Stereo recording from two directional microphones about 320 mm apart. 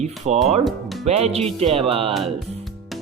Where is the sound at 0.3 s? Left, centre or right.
Right.